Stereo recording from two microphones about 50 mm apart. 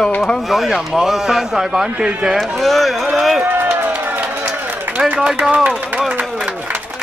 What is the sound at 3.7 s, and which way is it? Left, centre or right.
Run, right.